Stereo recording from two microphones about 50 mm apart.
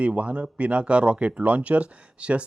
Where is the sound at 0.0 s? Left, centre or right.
Right.